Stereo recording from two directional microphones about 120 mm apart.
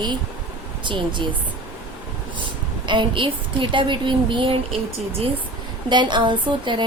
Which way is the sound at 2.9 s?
45° right (ahead or behind).